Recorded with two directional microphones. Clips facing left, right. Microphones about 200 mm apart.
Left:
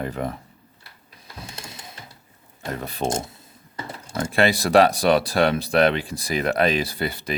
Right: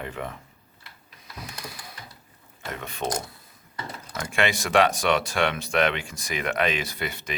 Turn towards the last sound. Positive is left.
turn(degrees=35)  # may be behind; listen again after turning